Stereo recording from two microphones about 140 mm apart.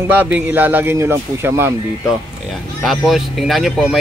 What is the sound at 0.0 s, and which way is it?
A man's voice, 10° right (ahead or behind).